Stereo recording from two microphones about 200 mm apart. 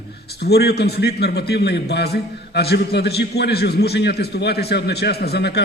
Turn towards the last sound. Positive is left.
turn(degrees=55)  # may be behind; listen again after turning